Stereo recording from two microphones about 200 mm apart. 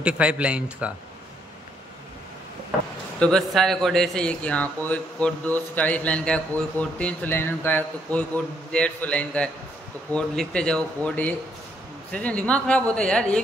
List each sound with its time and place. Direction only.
0.0 s speech: 5° right (ahead or behind)
3.2 s a man's voice: centre (ahead or behind)